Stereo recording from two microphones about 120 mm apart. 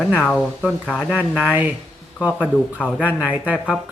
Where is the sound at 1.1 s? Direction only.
10° right (ahead or behind).